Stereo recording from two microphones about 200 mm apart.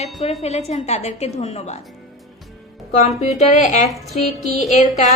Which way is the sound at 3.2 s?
35° left (ahead or behind).